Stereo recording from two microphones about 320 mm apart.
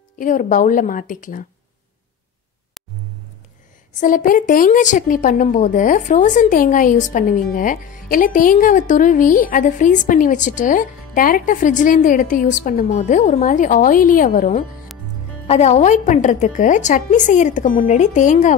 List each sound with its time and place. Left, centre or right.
0.2 s a woman's voice: left
4.0 s a woman's voice: left